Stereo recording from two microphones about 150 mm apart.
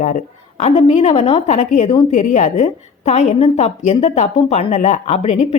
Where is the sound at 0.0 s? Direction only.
55° left (ahead or behind).